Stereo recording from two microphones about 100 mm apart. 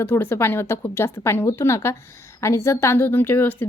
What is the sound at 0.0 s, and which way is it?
Speech, 20° left (ahead or behind).